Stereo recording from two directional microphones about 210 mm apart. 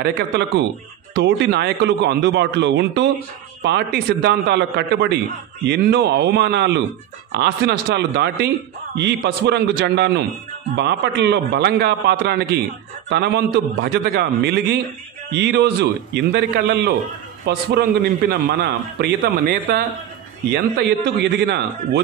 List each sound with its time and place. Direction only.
0.0 s a man's voice: 55° right (ahead or behind)